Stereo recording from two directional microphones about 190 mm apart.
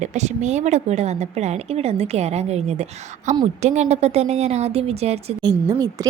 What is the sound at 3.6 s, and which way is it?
A woman's voice, 35° right (ahead or behind).